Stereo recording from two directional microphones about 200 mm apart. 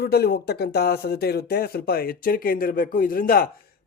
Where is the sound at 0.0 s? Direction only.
50° left (ahead or behind).